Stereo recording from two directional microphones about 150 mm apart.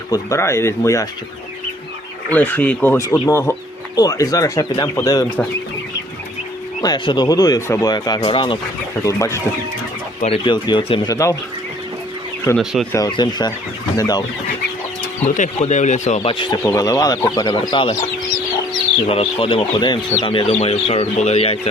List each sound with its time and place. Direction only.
0.1 s speech: 20° left (ahead or behind)
2.3 s speech: 10° left (ahead or behind)
3.0 s speech: 20° left (ahead or behind)
6.8 s speech: 30° left (ahead or behind)
9.0 s speech: 20° left (ahead or behind)
10.2 s speech: 45° left (ahead or behind)
11.1 s speech: 20° left (ahead or behind)
12.5 s speech: 5° left (ahead or behind)
12.9 s speech: 25° left (ahead or behind)
15.2 s speech: 50° left (ahead or behind); by 16.6 s 35° left (ahead or behind)
16.6 s speech: 25° left (ahead or behind)
19.0 s speech: 40° left (ahead or behind)